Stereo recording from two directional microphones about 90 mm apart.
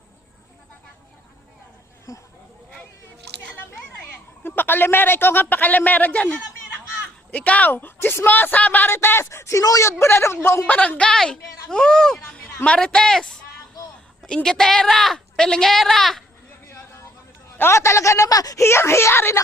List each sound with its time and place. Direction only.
2.1 s speech: 40° left (ahead or behind)
4.4 s a man's voice: 20° left (ahead or behind)
10.7 s a woman's voice: 15° left (ahead or behind)
16.6 s a sound: 30° left (ahead or behind)
17.6 s speech: 30° left (ahead or behind)